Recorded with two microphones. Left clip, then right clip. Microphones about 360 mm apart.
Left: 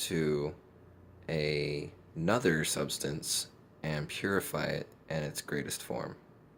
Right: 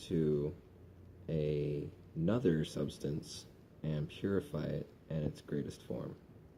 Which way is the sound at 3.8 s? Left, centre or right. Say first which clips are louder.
Left 5 dB; centre.